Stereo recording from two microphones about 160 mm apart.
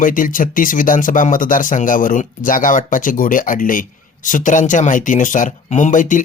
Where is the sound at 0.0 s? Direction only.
60° left (ahead or behind).